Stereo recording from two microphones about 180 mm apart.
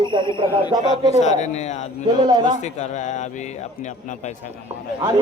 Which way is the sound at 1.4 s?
40° left (ahead or behind).